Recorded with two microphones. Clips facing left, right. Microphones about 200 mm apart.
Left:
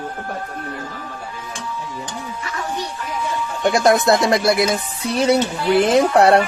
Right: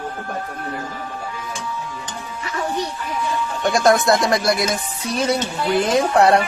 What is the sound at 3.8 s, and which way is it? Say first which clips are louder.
Speech: even; 25° left (ahead or behind).